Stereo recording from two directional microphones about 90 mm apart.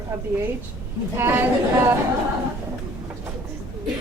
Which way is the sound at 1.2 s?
25° right (ahead or behind).